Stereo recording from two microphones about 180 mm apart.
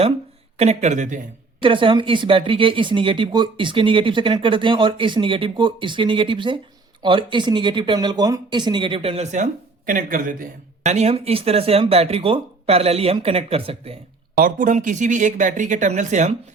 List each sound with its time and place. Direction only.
0.5 s speech: 35° right (ahead or behind)
1.6 s speech: 30° right (ahead or behind)
14.3 s speech: 50° right (ahead or behind)